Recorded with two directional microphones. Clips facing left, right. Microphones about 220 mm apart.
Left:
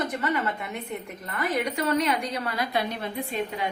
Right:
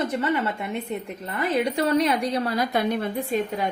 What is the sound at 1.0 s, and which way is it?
A woman's voice, 30° right (ahead or behind).